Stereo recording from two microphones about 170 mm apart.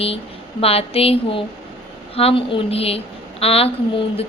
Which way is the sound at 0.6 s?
35° left (ahead or behind).